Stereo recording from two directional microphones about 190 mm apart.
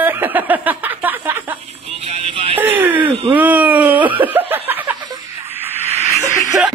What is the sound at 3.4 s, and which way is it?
Speech, 10° right (ahead or behind).